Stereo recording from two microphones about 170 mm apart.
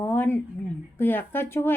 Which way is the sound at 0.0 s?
10° left (ahead or behind).